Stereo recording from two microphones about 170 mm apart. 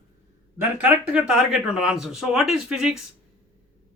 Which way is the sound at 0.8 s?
10° right (ahead or behind).